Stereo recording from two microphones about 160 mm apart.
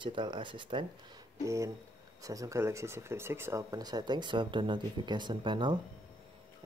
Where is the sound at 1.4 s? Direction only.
20° right (ahead or behind).